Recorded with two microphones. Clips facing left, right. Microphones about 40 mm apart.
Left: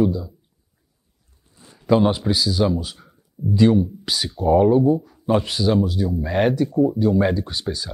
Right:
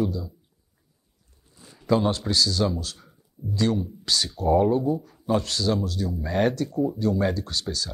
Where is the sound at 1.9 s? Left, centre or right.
Centre.